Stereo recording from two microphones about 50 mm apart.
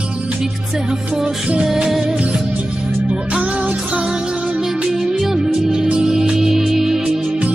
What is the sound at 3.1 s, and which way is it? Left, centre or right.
Music, right.